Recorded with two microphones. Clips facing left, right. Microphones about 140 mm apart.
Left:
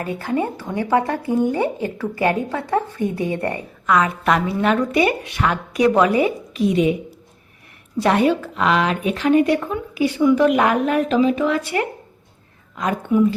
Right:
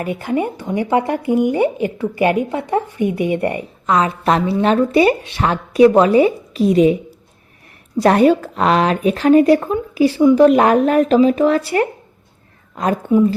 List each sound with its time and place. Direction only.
0.0 s speech: 15° right (ahead or behind)
3.8 s a woman's voice: 25° right (ahead or behind)
7.9 s a woman's voice: 40° right (ahead or behind)